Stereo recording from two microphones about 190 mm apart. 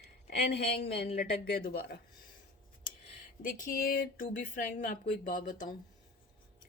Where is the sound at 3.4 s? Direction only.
45° left (ahead or behind).